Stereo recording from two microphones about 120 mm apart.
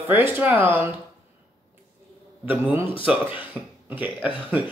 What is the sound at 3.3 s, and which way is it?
A woman's voice, 15° right (ahead or behind).